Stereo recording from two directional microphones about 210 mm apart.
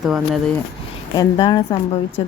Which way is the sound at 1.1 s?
20° left (ahead or behind).